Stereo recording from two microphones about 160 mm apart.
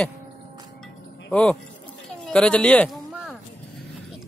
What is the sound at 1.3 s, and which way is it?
Speech, 5° left (ahead or behind).